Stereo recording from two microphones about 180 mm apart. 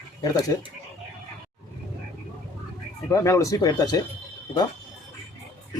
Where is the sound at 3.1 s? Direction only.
15° left (ahead or behind).